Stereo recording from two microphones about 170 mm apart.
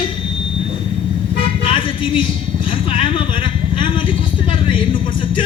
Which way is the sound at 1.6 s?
30° left (ahead or behind).